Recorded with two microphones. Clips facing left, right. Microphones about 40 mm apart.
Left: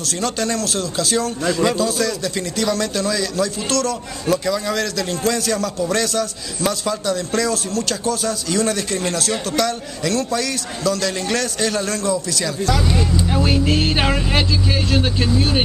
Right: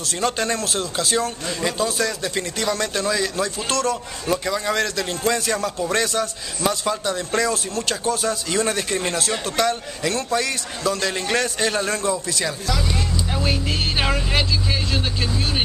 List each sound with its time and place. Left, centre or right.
0.0 s a man's voice: centre
12.9 s speech: centre